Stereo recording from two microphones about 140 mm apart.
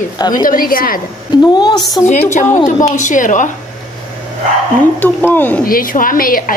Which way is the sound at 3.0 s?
65° left (ahead or behind).